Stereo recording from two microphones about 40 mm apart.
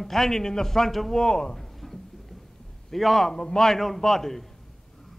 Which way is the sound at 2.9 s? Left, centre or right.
Centre.